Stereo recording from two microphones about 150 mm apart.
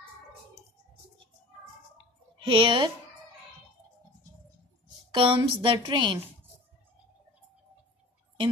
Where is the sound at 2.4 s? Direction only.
35° right (ahead or behind).